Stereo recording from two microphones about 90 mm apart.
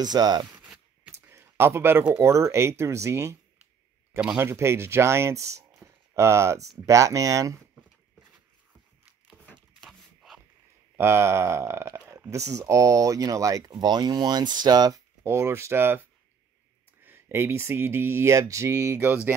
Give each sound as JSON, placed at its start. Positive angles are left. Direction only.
{"t": 0.0, "sound": "speech", "side_deg": -50}
{"t": 1.3, "sound": "a sound", "side_deg": -30}
{"t": 2.1, "sound": "speech", "side_deg": -30}
{"t": 4.4, "sound": "speech", "side_deg": -30}
{"t": 9.8, "sound": "a sound", "side_deg": 0}
{"t": 11.0, "sound": "speech", "side_deg": -25}
{"t": 15.2, "sound": "speech", "side_deg": -30}
{"t": 17.0, "sound": "speech", "side_deg": -25}
{"t": 18.9, "sound": "speech", "side_deg": -25}